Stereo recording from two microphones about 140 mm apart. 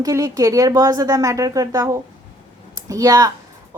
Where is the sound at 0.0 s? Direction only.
25° right (ahead or behind).